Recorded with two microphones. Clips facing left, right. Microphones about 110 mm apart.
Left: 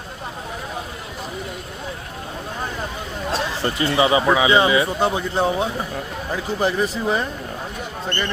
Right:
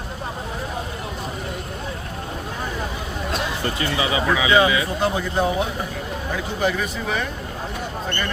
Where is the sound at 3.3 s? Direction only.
30° left (ahead or behind).